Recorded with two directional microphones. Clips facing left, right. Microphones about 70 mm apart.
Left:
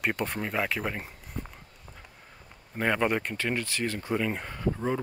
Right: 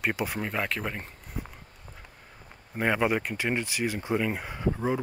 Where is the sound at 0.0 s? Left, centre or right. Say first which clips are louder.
Even; centre.